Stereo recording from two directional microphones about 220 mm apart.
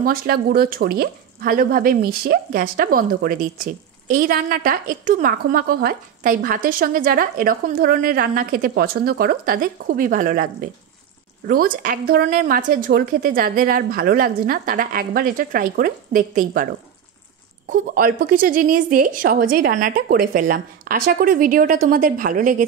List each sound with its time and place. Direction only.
0.0 s speech: 45° right (ahead or behind)
17.6 s speech: 40° right (ahead or behind)